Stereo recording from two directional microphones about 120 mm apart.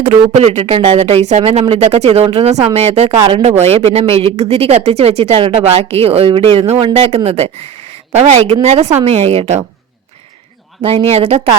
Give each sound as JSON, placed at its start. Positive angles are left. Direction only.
{"t": 0.1, "sound": "speech", "side_deg": -60}
{"t": 8.1, "sound": "a woman's voice", "side_deg": -70}
{"t": 8.6, "sound": "speech", "side_deg": -60}
{"t": 10.8, "sound": "speech", "side_deg": -55}